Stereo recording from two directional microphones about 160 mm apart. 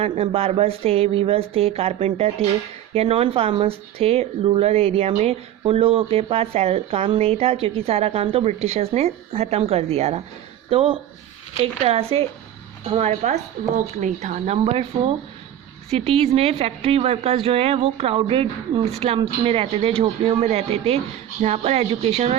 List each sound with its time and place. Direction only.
0.0 s a woman's voice: 35° right (ahead or behind)